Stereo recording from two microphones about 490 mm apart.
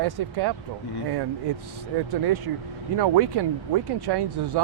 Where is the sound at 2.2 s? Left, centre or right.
Right.